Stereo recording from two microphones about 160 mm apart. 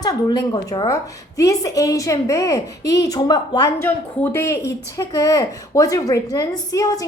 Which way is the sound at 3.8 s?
15° left (ahead or behind).